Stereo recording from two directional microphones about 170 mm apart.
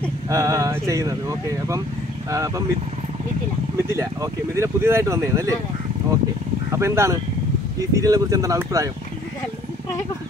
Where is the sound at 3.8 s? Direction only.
15° right (ahead or behind).